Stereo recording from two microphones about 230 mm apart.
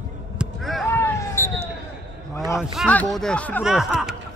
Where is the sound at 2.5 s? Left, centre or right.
Centre.